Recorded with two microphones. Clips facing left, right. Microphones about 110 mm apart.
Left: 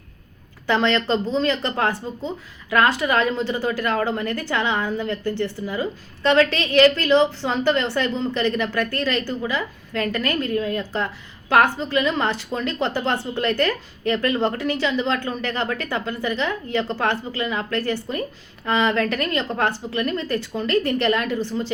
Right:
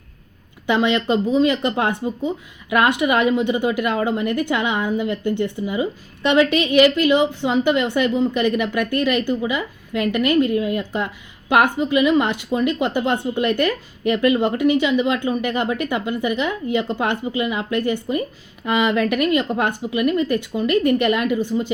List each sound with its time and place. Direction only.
0.7 s a woman's voice: 15° right (ahead or behind)
5.6 s a woman's voice: 5° right (ahead or behind)